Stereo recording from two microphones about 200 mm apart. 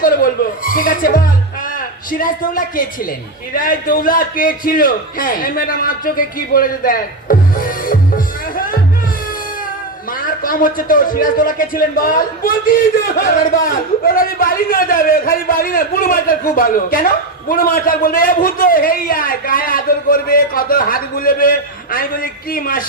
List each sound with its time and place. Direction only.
0.0 s a man's voice: 45° left (ahead or behind)
10.1 s a man's voice: 45° left (ahead or behind)